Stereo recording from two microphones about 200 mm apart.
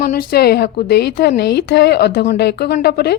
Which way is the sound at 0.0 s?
45° left (ahead or behind).